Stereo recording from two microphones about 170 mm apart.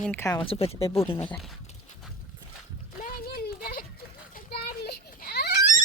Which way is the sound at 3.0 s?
60° left (ahead or behind).